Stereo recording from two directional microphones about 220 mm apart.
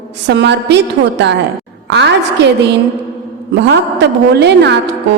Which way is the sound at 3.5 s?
50° right (ahead or behind).